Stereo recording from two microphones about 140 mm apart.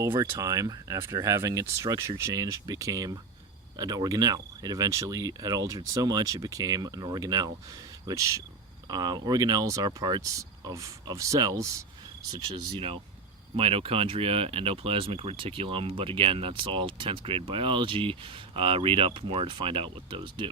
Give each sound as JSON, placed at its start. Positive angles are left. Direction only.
{"t": 0.3, "sound": "speech", "side_deg": -25}
{"t": 13.6, "sound": "speech", "side_deg": -45}